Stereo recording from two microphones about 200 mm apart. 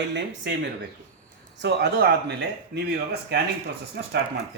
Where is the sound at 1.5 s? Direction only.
60° right (ahead or behind).